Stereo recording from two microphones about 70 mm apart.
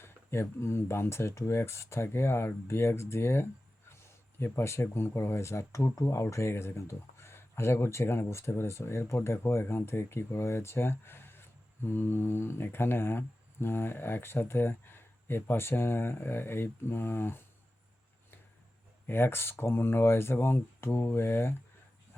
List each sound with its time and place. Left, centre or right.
0.0 s speech: left
19.0 s speech: left